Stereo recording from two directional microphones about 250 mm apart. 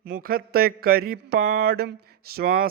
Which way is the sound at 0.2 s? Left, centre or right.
Right.